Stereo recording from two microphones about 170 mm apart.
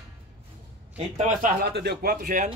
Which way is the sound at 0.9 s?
45° right (ahead or behind).